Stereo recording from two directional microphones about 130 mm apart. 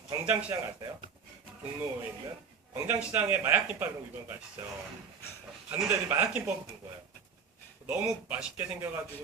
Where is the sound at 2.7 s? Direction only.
15° right (ahead or behind).